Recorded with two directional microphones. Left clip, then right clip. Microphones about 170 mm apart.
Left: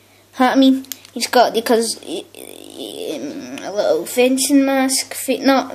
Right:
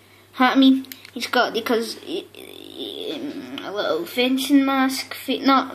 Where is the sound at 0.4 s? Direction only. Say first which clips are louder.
Left 3 dB; 50° left (ahead or behind).